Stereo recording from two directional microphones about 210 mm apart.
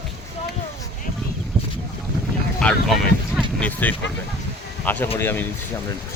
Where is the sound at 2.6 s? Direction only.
5° left (ahead or behind).